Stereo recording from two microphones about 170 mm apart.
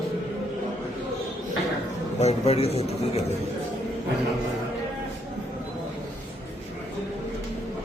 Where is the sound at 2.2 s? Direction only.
35° left (ahead or behind).